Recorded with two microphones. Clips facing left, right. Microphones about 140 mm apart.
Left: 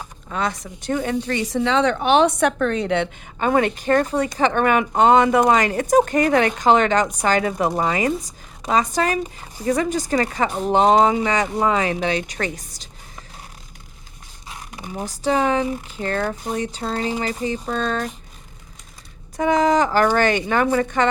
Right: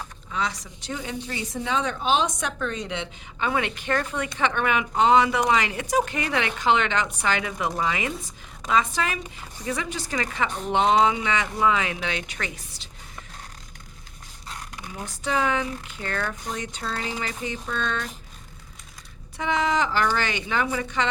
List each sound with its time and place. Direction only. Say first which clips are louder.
0.3 s a woman's voice: left 5 dB; 50° left (ahead or behind)
1.3 s a woman's voice: left 6 dB; 80° left; by 12.9 s 40° left (ahead or behind)
14.8 s a sound: left 9 dB; 15° left (ahead or behind)
15.0 s speech: left 6 dB; 35° left (ahead or behind)
19.4 s a woman's voice: left 7 dB; 45° left (ahead or behind)